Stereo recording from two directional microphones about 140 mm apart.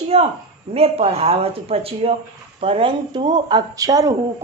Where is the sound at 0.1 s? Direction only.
45° right (ahead or behind).